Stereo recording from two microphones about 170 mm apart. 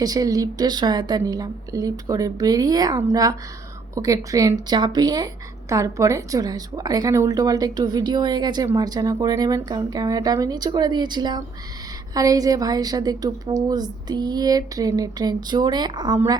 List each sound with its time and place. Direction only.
0.0 s speech: 20° right (ahead or behind)